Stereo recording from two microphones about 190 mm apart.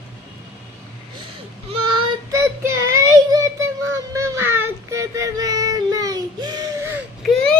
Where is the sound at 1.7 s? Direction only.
25° right (ahead or behind).